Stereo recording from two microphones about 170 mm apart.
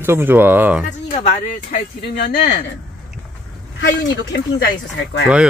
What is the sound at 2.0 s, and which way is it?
Speech, 75° left (ahead or behind).